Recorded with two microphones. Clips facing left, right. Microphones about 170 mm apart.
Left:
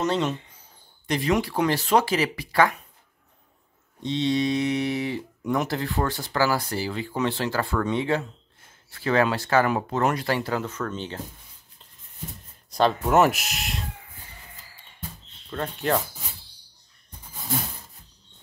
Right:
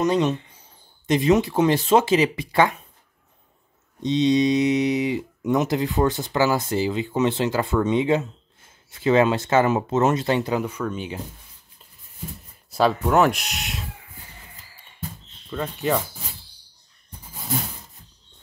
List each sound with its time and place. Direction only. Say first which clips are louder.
0.0 s speech: right 4 dB; 15° right (ahead or behind)
4.0 s speech: right 5 dB; 20° right (ahead or behind)
12.7 s speech: right 1 dB; centre (ahead or behind)
15.5 s speech: right 1 dB; centre (ahead or behind)